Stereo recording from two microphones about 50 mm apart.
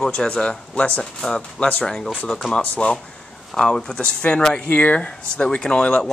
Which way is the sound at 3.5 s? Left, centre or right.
Centre.